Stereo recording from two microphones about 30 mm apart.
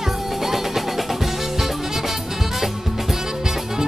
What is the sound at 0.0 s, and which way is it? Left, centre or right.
Music, centre.